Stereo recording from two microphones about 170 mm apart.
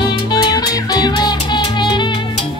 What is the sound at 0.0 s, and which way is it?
Music, 25° left (ahead or behind).